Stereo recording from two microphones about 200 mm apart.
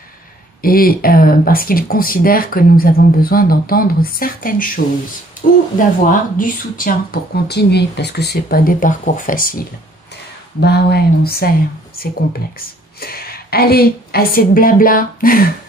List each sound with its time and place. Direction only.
0.6 s speech: 45° left (ahead or behind)
5.8 s speech: 40° left (ahead or behind)